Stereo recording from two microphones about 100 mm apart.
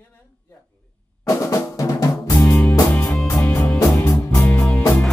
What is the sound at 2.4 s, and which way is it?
Music, 20° left (ahead or behind).